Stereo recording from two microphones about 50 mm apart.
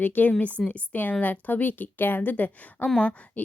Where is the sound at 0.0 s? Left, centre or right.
Left.